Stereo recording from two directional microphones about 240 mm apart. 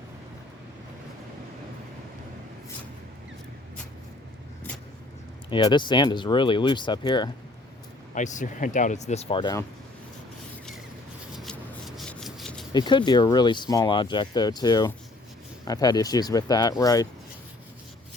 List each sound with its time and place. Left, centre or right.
5.5 s speech: centre
8.1 s speech: left
11.3 s rub: centre
12.7 s speech: centre